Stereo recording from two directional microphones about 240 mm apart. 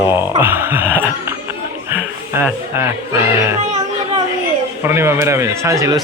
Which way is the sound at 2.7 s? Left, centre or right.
Centre.